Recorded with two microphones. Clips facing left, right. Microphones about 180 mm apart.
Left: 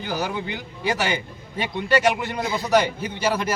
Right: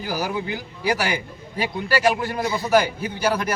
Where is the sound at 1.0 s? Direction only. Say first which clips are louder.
Even; 25° left (ahead or behind).